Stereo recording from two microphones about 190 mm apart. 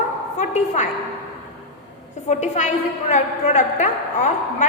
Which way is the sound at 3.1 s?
40° left (ahead or behind).